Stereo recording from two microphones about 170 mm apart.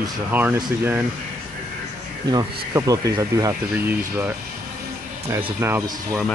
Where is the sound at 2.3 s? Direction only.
20° right (ahead or behind).